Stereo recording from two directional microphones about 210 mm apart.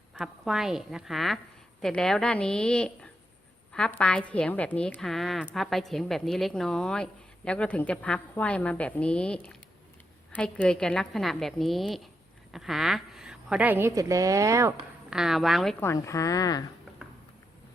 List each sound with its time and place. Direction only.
0.1 s a woman's voice: centre (ahead or behind)
15.1 s a woman's voice: centre (ahead or behind)
15.8 s a woman's voice: 15° left (ahead or behind)